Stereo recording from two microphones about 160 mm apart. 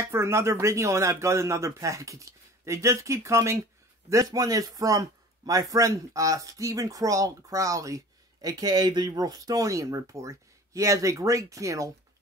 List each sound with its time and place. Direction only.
0.0 s speech: 15° right (ahead or behind)